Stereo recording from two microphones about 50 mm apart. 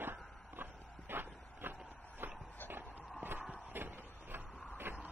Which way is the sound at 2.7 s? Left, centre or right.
Right.